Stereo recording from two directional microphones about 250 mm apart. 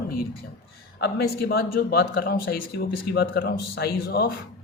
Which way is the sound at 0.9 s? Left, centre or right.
Left.